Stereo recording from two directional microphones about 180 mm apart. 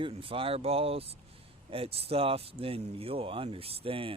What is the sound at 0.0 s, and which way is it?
Speech, 30° right (ahead or behind).